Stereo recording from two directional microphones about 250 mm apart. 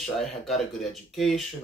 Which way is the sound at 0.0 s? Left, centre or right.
Centre.